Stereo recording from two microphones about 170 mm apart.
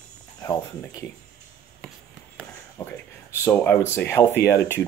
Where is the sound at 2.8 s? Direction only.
15° left (ahead or behind).